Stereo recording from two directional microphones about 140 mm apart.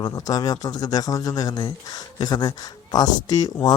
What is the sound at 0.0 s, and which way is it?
Speech, 30° left (ahead or behind).